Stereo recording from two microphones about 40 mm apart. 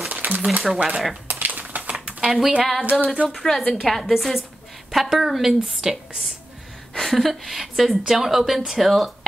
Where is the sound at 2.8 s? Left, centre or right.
Right.